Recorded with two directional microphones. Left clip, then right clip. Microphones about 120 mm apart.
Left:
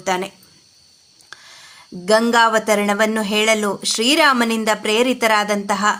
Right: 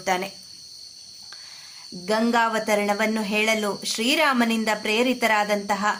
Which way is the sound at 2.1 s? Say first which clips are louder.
Left 8 dB; 40° left (ahead or behind).